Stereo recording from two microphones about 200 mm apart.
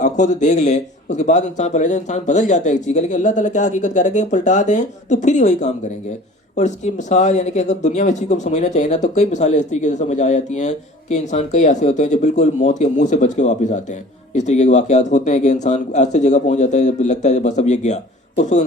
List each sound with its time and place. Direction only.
0.0 s speech: 40° left (ahead or behind)